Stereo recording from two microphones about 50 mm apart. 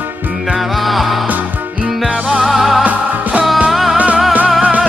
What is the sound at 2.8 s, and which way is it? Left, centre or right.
Music, right.